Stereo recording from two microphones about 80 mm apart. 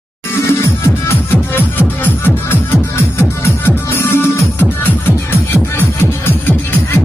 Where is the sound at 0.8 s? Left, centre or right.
Left.